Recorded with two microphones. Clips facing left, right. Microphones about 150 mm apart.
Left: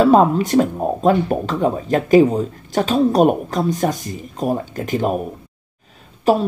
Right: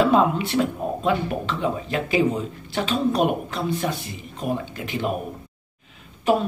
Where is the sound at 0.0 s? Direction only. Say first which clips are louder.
Left 6 dB; 40° left (ahead or behind).